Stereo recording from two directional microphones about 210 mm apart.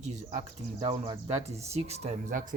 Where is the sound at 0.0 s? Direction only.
35° right (ahead or behind).